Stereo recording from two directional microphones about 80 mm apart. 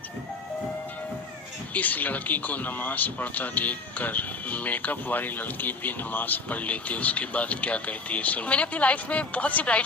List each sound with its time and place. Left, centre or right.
1.7 s speech: left